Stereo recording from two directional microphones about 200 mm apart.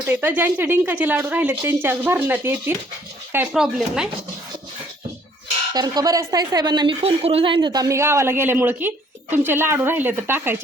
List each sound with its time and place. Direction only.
0.0 s a woman's voice: 10° right (ahead or behind)
5.7 s a woman's voice: 20° right (ahead or behind)